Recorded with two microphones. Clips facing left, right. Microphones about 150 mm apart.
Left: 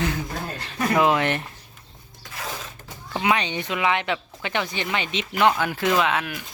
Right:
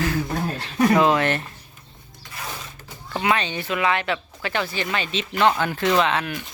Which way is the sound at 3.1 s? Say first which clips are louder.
Even; 15° left (ahead or behind).